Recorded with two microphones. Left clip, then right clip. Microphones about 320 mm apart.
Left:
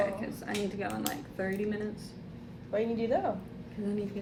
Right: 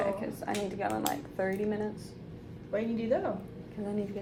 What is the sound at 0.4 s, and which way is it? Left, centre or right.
A woman's voice, centre.